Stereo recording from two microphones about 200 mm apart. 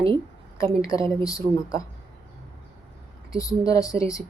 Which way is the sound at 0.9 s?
25° right (ahead or behind).